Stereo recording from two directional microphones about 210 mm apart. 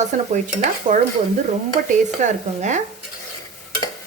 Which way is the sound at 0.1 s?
35° right (ahead or behind).